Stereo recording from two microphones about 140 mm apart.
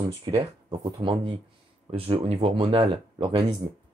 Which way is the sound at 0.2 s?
35° right (ahead or behind).